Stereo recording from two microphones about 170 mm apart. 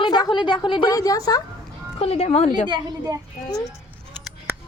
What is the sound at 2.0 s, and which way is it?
Speech, 35° left (ahead or behind).